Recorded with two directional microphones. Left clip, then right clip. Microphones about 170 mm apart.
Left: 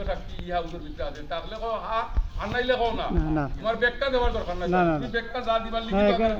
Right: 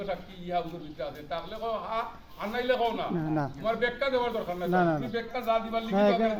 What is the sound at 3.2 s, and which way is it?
Speech, 30° left (ahead or behind).